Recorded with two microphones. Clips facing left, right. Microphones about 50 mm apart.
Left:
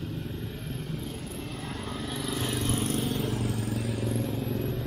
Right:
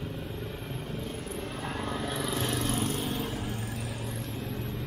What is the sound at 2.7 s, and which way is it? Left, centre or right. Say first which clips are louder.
Vehicle: left 1 dB; right.